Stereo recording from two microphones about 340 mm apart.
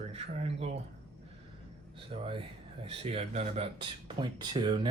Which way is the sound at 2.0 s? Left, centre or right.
Centre.